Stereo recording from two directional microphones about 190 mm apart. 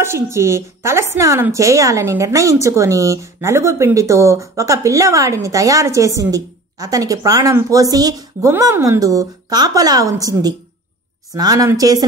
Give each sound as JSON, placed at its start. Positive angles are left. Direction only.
{"t": 0.0, "sound": "a woman's voice", "side_deg": -15}